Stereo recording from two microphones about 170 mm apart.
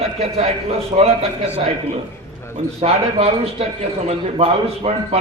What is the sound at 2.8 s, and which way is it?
A man's voice, 35° right (ahead or behind).